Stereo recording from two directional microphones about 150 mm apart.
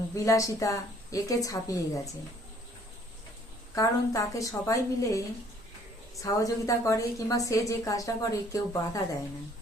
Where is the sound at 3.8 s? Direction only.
20° left (ahead or behind).